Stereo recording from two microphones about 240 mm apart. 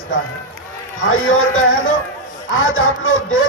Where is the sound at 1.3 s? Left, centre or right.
Left.